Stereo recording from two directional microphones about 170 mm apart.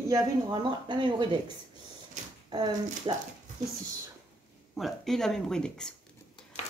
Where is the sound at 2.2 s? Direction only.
45° right (ahead or behind).